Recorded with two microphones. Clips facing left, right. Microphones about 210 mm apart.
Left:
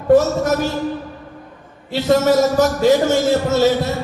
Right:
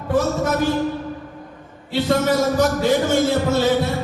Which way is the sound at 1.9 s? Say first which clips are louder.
Left 4 dB; 55° right (ahead or behind).